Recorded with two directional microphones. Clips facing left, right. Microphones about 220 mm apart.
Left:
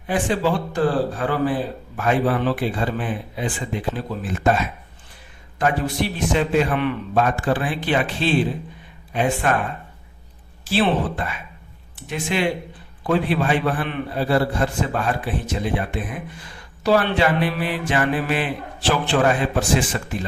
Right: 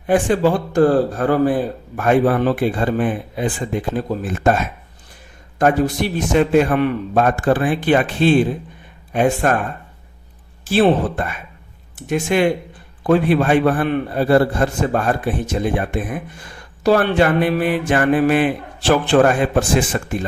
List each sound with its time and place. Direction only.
0.1 s a man's voice: 45° right (ahead or behind)
10.7 s a man's voice: 50° right (ahead or behind)